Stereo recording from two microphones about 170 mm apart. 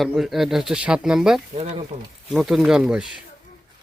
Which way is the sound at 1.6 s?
35° right (ahead or behind).